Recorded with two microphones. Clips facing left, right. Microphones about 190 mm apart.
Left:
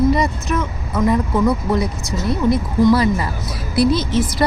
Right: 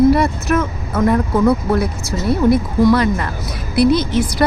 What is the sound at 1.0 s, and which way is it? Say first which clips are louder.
Speech: right 3 dB; centre (ahead or behind).